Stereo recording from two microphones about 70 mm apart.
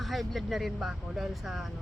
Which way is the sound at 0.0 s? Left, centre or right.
Centre.